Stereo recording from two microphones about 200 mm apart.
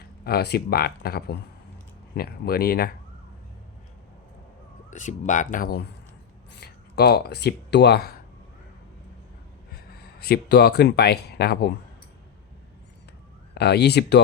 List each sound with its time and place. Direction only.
0.3 s speech: 55° left (ahead or behind)
4.9 s speech: 40° left (ahead or behind)
6.5 s speech: 55° left (ahead or behind)
10.2 s speech: 50° left (ahead or behind)
13.5 s speech: 55° left (ahead or behind)